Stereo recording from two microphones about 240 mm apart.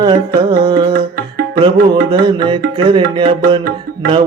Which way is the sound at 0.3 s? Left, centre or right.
Centre.